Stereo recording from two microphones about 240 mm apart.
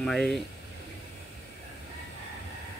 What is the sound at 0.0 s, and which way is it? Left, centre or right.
Speech, centre.